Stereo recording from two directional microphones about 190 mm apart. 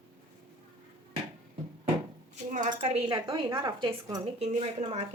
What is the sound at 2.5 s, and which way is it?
Speech, 40° right (ahead or behind).